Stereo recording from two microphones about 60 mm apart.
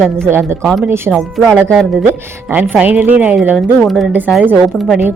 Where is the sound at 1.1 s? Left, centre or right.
Centre.